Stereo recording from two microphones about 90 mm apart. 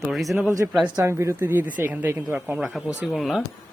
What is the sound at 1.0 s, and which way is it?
A woman's voice, 30° right (ahead or behind).